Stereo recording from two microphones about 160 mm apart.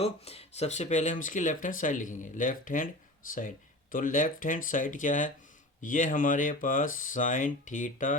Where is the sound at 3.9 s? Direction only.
55° left (ahead or behind).